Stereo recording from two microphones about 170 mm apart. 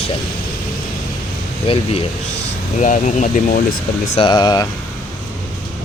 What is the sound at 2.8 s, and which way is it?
Speech, 45° left (ahead or behind).